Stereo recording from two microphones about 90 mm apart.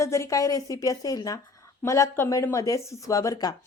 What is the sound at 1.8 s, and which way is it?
Speech, 30° left (ahead or behind).